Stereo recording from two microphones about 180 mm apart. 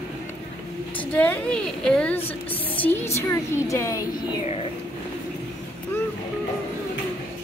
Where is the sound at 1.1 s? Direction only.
10° left (ahead or behind).